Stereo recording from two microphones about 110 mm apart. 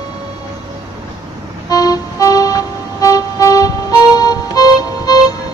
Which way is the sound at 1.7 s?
35° left (ahead or behind).